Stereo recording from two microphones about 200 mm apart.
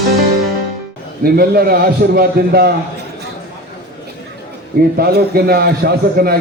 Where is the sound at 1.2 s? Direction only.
50° right (ahead or behind).